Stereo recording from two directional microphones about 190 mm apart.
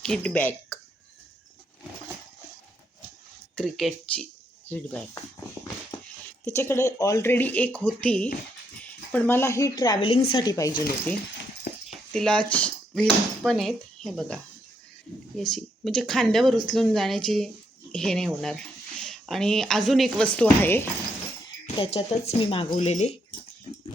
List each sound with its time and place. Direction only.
0.0 s speech: 5° left (ahead or behind)
3.5 s speech: 5° left (ahead or behind)
6.2 s speech: 15° left (ahead or behind)
11.9 s speech: 5° left (ahead or behind)
21.8 s speech: 30° left (ahead or behind)